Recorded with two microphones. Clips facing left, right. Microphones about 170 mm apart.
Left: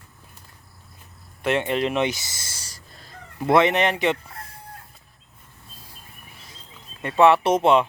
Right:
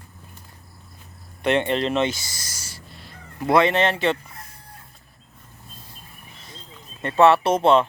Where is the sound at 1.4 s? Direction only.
5° left (ahead or behind); by 2.8 s 30° left (ahead or behind).